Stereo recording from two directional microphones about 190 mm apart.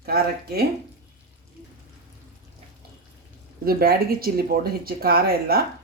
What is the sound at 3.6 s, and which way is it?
Speech, 55° right (ahead or behind).